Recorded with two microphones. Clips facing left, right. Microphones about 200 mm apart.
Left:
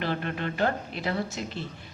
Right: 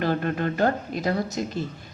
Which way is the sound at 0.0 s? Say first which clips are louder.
Right 6 dB; 45° right (ahead or behind).